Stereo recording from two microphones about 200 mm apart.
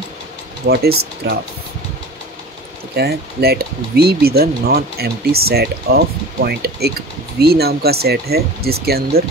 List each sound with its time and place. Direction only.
0.7 s speech: 50° right (ahead or behind)
3.0 s speech: 55° right (ahead or behind)